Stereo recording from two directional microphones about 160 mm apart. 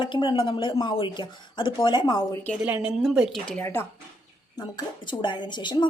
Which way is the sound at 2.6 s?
5° right (ahead or behind).